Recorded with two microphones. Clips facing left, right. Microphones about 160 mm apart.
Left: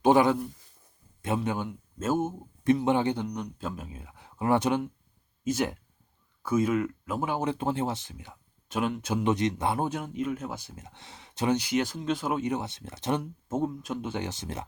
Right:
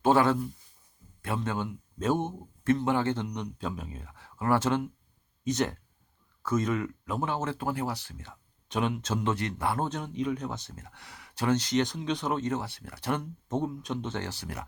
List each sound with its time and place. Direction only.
0.0 s speech: 15° left (ahead or behind)
1.4 s speech: 10° left (ahead or behind)
2.6 s speech: 20° left (ahead or behind)
3.2 s speech: centre (ahead or behind); by 8.4 s 15° left (ahead or behind)
8.7 s speech: 5° left (ahead or behind); by 13.2 s 20° left (ahead or behind)
13.5 s speech: 5° left (ahead or behind); by 14.7 s 25° left (ahead or behind)